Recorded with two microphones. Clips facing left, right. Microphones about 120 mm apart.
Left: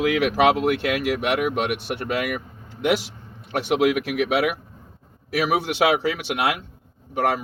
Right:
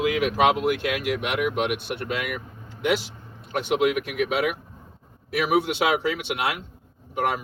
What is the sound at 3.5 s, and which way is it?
Speech, 70° left (ahead or behind).